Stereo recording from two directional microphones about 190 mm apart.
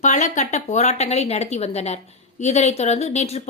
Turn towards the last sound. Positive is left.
turn(degrees=35)  # may be behind; listen again after turning